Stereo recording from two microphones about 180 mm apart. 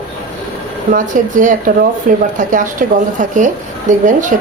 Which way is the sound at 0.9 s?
45° right (ahead or behind).